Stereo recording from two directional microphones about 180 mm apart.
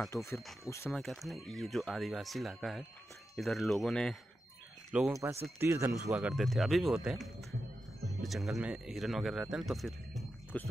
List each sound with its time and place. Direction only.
0.1 s speech: 15° left (ahead or behind)
1.0 s speech: centre (ahead or behind)
6.0 s speech: 5° right (ahead or behind)